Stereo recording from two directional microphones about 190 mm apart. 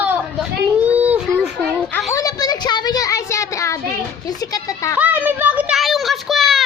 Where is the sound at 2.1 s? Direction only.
20° left (ahead or behind).